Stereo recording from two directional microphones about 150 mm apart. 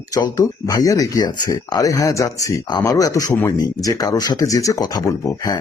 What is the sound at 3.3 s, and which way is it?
Speech, 15° left (ahead or behind).